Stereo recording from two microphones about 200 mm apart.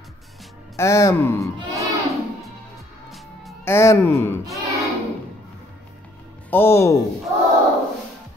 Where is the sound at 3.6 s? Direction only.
15° left (ahead or behind).